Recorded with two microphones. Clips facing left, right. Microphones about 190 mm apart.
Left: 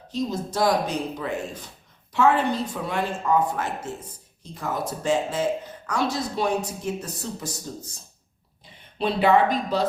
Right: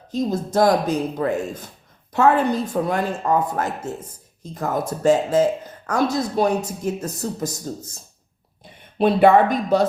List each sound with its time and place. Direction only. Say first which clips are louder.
0.1 s speech: right 5 dB; 50° right (ahead or behind)
8.6 s speech: right 7 dB; 50° right (ahead or behind)